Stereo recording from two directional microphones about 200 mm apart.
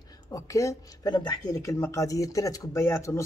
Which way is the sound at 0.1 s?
15° left (ahead or behind).